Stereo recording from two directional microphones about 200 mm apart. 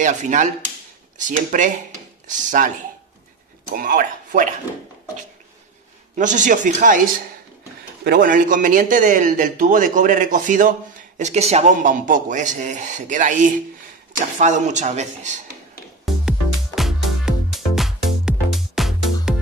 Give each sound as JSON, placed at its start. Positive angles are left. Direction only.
{"t": 0.0, "sound": "a man's voice", "side_deg": -40}
{"t": 3.7, "sound": "a man's voice", "side_deg": -45}
{"t": 6.1, "sound": "a man's voice", "side_deg": -40}
{"t": 8.0, "sound": "a man's voice", "side_deg": -50}
{"t": 16.1, "sound": "music", "side_deg": 0}